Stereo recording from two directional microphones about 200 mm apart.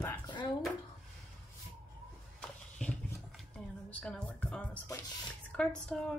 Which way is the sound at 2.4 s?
5° left (ahead or behind).